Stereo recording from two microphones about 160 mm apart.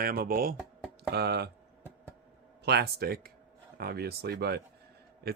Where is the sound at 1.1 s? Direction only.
90° right.